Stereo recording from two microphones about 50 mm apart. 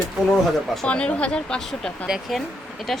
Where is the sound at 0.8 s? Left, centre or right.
Left.